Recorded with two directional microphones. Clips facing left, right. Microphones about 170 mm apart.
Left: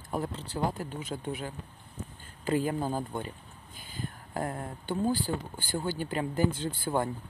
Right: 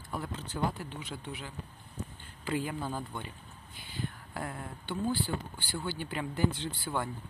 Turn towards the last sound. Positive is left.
turn(degrees=45)  # may be behind; listen again after turning